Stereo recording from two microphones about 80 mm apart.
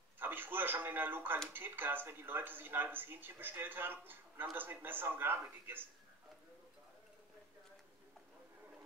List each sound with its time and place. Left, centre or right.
0.2 s speech: right